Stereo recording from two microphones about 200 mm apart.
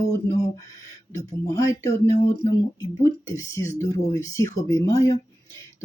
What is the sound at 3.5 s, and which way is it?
Speech, 15° left (ahead or behind).